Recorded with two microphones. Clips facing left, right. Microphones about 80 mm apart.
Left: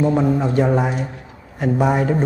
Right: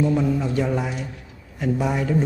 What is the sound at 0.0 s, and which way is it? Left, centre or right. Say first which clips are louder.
A man's voice: left 4 dB; left.